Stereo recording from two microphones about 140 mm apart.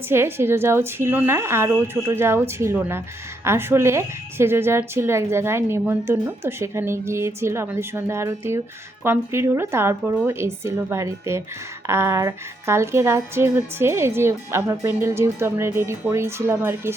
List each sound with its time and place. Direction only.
0.1 s a woman's voice: 15° right (ahead or behind)